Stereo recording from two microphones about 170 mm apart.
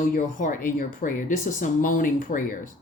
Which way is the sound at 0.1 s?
55° left (ahead or behind).